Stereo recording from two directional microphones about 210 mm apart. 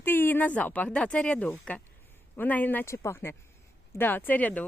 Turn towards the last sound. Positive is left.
turn(degrees=5)  # may be behind; listen again after turning